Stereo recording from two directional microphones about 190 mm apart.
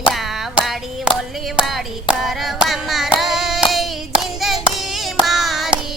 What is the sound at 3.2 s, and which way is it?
Hands, centre (ahead or behind).